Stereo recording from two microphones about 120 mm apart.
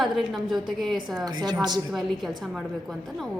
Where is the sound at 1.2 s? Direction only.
35° right (ahead or behind).